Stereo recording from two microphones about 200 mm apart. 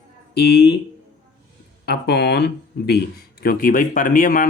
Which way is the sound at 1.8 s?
55° left (ahead or behind).